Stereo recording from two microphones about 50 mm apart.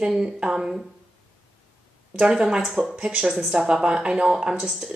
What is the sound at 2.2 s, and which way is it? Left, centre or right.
A woman's voice, centre.